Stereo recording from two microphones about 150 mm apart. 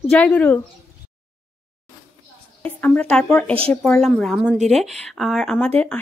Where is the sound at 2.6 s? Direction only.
10° left (ahead or behind).